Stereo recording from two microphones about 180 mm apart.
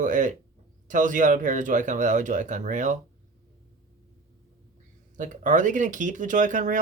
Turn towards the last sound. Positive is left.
turn(degrees=-45)  # may be behind; listen again after turning